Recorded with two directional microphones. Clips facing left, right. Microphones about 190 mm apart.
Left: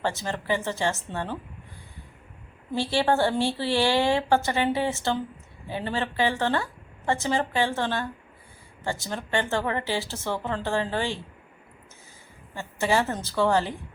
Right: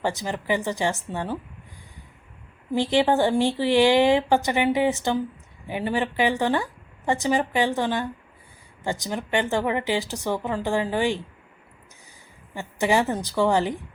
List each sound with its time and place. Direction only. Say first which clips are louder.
0.0 s speech: right 2 dB; 15° right (ahead or behind)
2.7 s speech: right 3 dB; 15° right (ahead or behind)
12.5 s speech: right 3 dB; 15° right (ahead or behind)